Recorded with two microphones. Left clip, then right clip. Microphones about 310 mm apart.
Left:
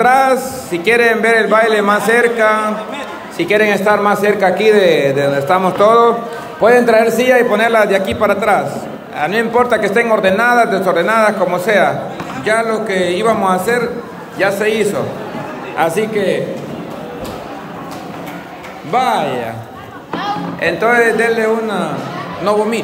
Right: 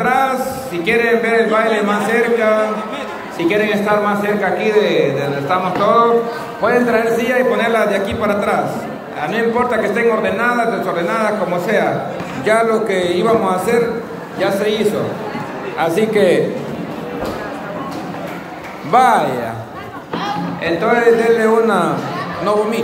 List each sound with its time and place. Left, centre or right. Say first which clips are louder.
0.0 s a sound: left 5 dB; centre
0.8 s a man's voice: left 3 dB; centre
18.9 s a man's voice: right 3 dB; centre